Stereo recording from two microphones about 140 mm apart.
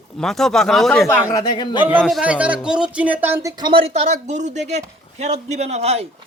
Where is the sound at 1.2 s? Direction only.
25° left (ahead or behind).